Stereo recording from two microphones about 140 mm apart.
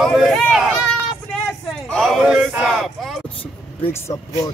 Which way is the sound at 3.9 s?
25° left (ahead or behind).